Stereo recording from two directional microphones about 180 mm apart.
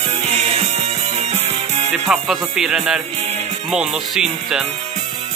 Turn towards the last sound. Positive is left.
turn(degrees=-5)  # may be behind; listen again after turning